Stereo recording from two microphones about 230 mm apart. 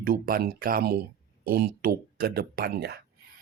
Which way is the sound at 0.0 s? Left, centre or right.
Right.